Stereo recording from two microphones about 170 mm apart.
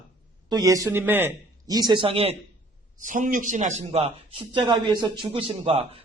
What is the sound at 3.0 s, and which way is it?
A man's voice, 50° right (ahead or behind).